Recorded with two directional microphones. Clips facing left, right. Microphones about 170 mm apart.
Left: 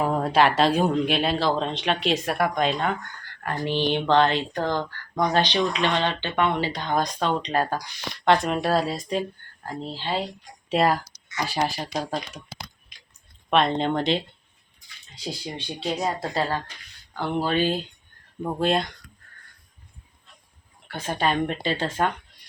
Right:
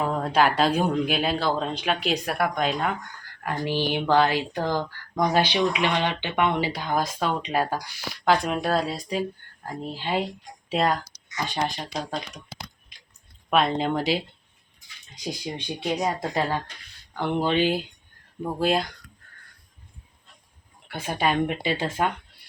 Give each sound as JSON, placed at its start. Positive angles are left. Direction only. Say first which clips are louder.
{"t": 0.0, "sound": "speech", "louder": "left 2 dB", "side_deg": 5}
{"t": 9.8, "sound": "speech", "louder": "right 1 dB", "side_deg": -15}
{"t": 10.7, "sound": "speech", "louder": "left 2 dB", "side_deg": 5}
{"t": 13.5, "sound": "speech", "louder": "left 1 dB", "side_deg": -5}
{"t": 15.1, "sound": "speech", "louder": "right 1 dB", "side_deg": -15}
{"t": 18.4, "sound": "speech", "louder": "even", "side_deg": -5}
{"t": 20.8, "sound": "speech", "louder": "even", "side_deg": -10}